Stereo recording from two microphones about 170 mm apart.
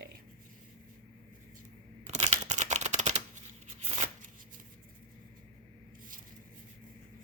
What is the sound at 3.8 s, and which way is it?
Shuffling cards, 40° right (ahead or behind).